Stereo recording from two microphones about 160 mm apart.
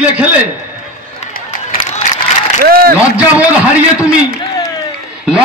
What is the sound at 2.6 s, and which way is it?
Speech, 65° right (ahead or behind).